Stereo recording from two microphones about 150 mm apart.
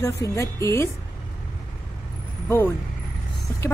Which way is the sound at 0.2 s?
20° left (ahead or behind).